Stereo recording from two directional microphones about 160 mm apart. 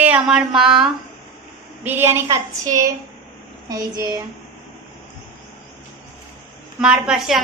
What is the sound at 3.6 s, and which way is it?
Speech, 25° right (ahead or behind).